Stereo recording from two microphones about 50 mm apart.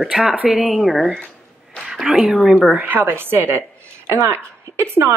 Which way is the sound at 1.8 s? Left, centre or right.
Centre.